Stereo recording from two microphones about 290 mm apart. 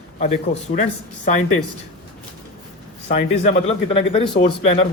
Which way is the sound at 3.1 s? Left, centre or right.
Left.